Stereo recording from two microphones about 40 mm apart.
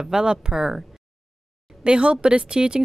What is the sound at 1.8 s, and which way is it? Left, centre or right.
A woman's voice, right.